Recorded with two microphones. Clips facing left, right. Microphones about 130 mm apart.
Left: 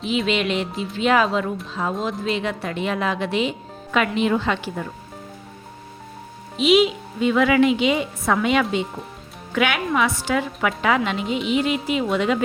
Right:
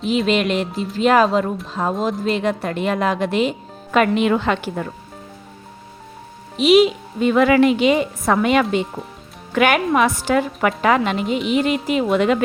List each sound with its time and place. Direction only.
0.1 s a woman's voice: 45° right (ahead or behind)
6.7 s speech: 45° right (ahead or behind)